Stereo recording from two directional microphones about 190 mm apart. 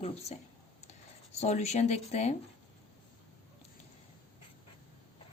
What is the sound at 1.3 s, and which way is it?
A woman's voice, 35° left (ahead or behind).